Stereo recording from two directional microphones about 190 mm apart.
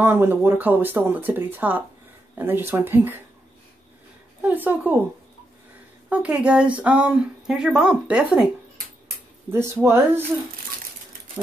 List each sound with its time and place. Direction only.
0.0 s speech: 10° right (ahead or behind)
4.4 s speech: 10° right (ahead or behind)
6.0 s speech: 5° right (ahead or behind)
9.5 s speech: 10° right (ahead or behind)